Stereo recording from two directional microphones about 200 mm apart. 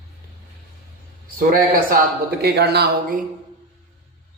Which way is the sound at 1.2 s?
45° right (ahead or behind).